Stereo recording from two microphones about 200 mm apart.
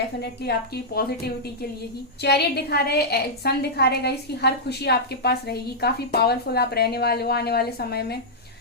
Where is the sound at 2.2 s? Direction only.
55° left (ahead or behind).